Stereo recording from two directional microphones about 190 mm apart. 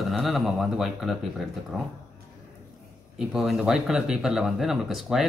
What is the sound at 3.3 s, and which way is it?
Speech, centre (ahead or behind).